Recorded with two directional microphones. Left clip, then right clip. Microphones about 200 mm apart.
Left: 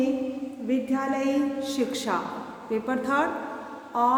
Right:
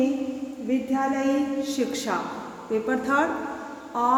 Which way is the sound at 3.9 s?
Centre (ahead or behind).